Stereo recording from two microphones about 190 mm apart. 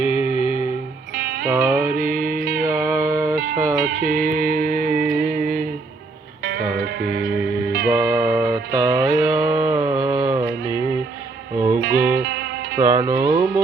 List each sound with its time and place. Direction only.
0.2 s music: 35° left (ahead or behind)
1.1 s music: 50° right (ahead or behind)
1.5 s music: 10° right (ahead or behind)
1.9 s music: 50° right (ahead or behind)
2.6 s music: 15° right (ahead or behind)
3.8 s music: 50° right (ahead or behind)
6.4 s music: 55° right (ahead or behind)
7.9 s music: 10° right (ahead or behind)
11.8 s music: 55° right (ahead or behind)
12.7 s music: 15° right (ahead or behind)